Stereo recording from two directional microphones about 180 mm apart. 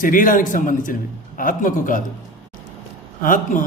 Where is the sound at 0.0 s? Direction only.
50° left (ahead or behind).